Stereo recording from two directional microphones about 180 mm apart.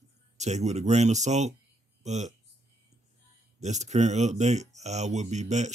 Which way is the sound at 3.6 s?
40° right (ahead or behind).